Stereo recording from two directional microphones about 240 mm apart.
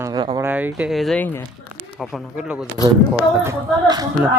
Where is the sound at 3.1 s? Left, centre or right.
Centre.